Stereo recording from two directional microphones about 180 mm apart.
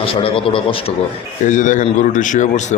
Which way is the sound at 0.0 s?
30° left (ahead or behind).